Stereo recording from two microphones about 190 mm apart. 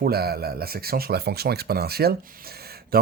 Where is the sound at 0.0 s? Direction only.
55° right (ahead or behind).